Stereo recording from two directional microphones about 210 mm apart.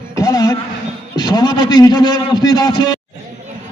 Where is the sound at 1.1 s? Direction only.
20° left (ahead or behind).